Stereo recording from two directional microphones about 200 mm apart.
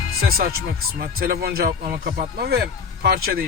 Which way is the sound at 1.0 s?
50° right (ahead or behind).